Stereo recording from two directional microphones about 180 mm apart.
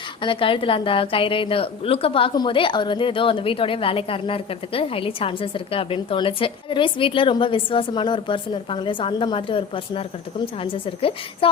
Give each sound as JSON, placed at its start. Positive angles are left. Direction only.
{"t": 0.2, "sound": "a woman's voice", "side_deg": 30}